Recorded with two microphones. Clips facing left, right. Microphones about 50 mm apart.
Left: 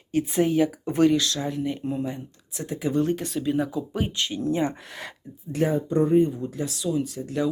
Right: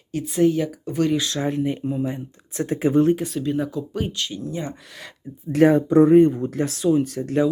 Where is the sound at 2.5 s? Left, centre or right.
Right.